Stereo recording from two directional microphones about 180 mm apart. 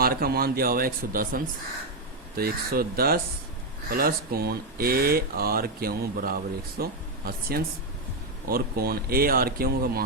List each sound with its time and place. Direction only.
0.0 s speech: 55° right (ahead or behind)
8.4 s speech: 55° right (ahead or behind)